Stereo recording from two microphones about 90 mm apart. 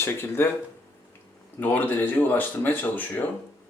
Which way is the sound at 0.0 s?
25° left (ahead or behind).